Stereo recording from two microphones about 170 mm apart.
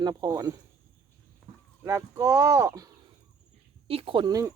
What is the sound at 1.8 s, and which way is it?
Speech, 15° right (ahead or behind).